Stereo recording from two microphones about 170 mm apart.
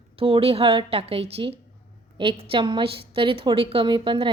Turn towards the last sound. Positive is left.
turn(degrees=-30)  # may be behind; listen again after turning